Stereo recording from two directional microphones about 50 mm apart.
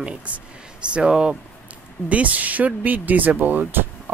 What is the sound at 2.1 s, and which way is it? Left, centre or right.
Speech, right.